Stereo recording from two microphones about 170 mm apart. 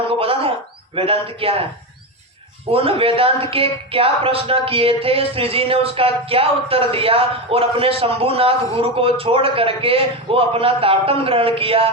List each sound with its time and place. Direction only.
0.1 s a sound: 35° right (ahead or behind)
0.9 s speech: 35° right (ahead or behind)
2.7 s speech: 35° right (ahead or behind)